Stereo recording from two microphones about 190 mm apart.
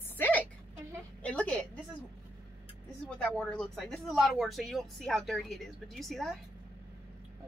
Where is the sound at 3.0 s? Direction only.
5° left (ahead or behind).